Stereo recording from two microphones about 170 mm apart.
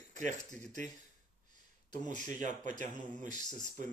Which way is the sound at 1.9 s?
45° right (ahead or behind).